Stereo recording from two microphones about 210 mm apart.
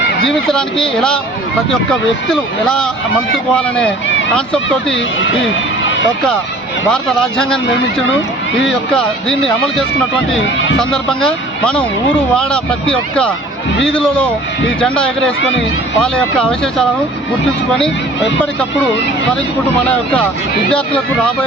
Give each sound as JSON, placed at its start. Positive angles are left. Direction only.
{"t": 0.3, "sound": "speech", "side_deg": 5}
{"t": 6.8, "sound": "speech", "side_deg": 5}
{"t": 8.9, "sound": "speech", "side_deg": 5}
{"t": 10.4, "sound": "speech", "side_deg": 60}
{"t": 10.8, "sound": "speech", "side_deg": 5}
{"t": 20.7, "sound": "speech", "side_deg": 5}